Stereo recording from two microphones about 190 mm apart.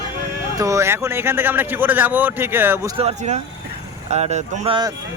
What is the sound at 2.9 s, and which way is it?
Speech, 35° right (ahead or behind).